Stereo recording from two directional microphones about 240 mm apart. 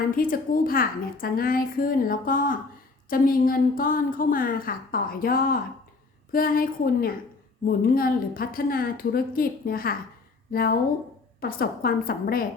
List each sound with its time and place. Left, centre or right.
0.1 s a woman's voice: left